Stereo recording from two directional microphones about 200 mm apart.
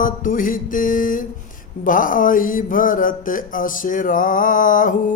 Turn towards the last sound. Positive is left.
turn(degrees=40)  # may be behind; listen again after turning